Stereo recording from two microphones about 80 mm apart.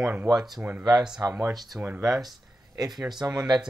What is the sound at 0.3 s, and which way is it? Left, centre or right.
Speech, right.